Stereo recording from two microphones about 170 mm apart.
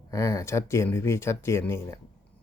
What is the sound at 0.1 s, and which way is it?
Speech, 15° left (ahead or behind).